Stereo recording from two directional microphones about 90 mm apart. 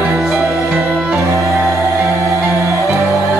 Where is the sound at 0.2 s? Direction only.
Centre (ahead or behind).